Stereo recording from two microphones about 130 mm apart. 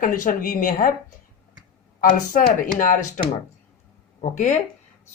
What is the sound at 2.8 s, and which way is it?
Speech, 75° left (ahead or behind).